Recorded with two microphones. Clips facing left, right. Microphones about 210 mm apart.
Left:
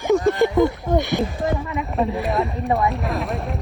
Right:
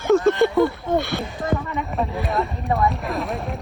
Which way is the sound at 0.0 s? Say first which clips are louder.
Right 1 dB; 15° left (ahead or behind).